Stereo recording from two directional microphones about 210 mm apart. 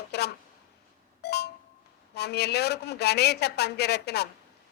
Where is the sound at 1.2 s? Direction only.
50° left (ahead or behind).